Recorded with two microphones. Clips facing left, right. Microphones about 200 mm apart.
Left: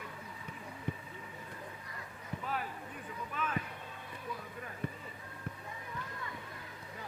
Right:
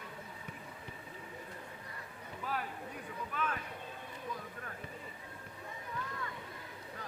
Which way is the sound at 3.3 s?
5° left (ahead or behind).